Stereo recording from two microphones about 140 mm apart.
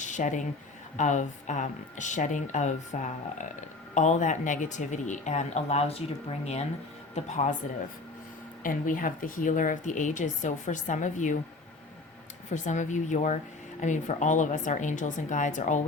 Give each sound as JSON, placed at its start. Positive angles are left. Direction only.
{"t": 0.0, "sound": "speech", "side_deg": 60}
{"t": 8.6, "sound": "speech", "side_deg": 75}
{"t": 12.5, "sound": "speech", "side_deg": 60}